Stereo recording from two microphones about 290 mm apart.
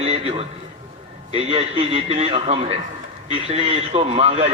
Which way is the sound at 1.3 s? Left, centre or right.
Right.